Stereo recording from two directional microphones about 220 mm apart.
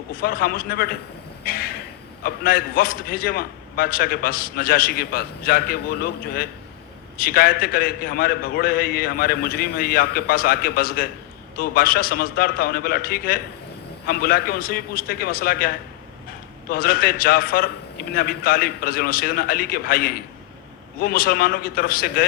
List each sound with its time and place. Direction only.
0.2 s a man's voice: 45° left (ahead or behind)
1.5 s a sound: 45° left (ahead or behind)
2.2 s a man's voice: 45° left (ahead or behind)